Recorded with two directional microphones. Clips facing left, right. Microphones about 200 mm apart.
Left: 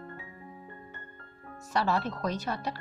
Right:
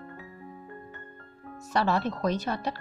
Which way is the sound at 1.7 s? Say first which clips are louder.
Right 2 dB; 20° right (ahead or behind).